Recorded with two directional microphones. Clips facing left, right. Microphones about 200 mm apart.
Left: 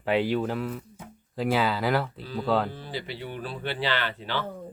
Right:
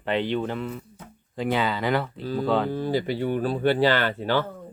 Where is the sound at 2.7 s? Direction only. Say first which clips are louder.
Right 11 dB; 45° right (ahead or behind).